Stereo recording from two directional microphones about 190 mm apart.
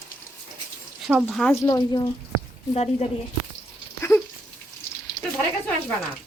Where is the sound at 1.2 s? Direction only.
5° left (ahead or behind).